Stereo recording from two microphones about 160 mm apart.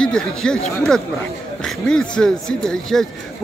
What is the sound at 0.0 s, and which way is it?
Speech, 5° left (ahead or behind).